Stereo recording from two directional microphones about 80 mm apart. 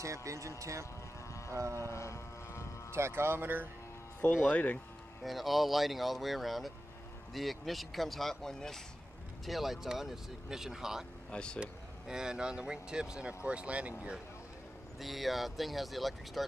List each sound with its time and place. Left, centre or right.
0.0 s speech: right
1.9 s vehicle: left
2.9 s speech: right
4.5 s speech: centre
5.2 s speech: centre
11.2 s speech: centre
11.6 s speech: centre
15.0 s speech: centre